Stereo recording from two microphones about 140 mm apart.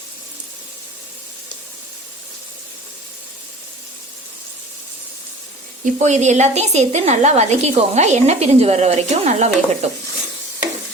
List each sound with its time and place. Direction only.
5.8 s a woman's voice: 55° right (ahead or behind)